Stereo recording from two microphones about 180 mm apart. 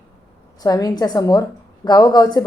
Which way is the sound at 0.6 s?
20° left (ahead or behind).